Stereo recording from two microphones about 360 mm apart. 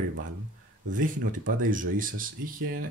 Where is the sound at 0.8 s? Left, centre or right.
Right.